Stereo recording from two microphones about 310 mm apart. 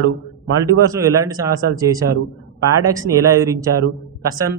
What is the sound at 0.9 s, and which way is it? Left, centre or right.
A man's voice, centre.